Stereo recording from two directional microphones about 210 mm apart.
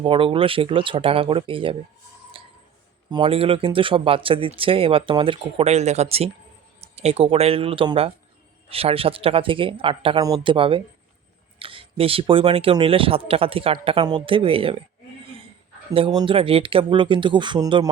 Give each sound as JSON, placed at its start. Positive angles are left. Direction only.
{"t": 0.0, "sound": "speech", "side_deg": -25}
{"t": 2.3, "sound": "tick", "side_deg": -25}
{"t": 3.1, "sound": "speech", "side_deg": -25}
{"t": 16.0, "sound": "speech", "side_deg": -25}